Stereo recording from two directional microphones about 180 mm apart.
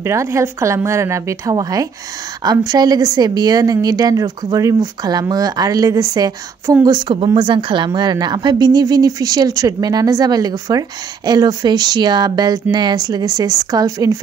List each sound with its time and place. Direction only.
0.0 s a woman's voice: 15° right (ahead or behind)